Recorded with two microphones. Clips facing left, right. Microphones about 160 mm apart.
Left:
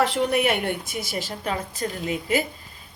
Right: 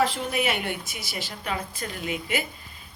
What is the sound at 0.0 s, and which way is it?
A woman's voice, 60° left (ahead or behind).